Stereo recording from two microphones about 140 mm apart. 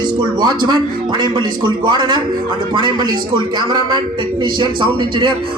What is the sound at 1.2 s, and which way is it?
A man's voice, 30° right (ahead or behind).